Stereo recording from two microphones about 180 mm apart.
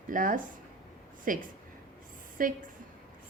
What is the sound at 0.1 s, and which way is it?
A woman's voice, 50° right (ahead or behind).